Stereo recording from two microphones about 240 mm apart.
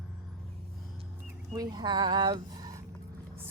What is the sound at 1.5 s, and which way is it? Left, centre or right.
A woman's voice, centre.